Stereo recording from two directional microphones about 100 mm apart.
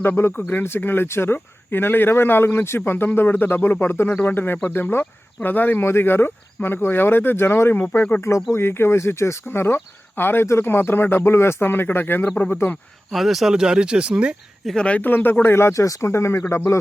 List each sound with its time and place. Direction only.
0.0 s speech: 25° left (ahead or behind)
13.1 s speech: centre (ahead or behind)
14.8 s speech: 15° left (ahead or behind)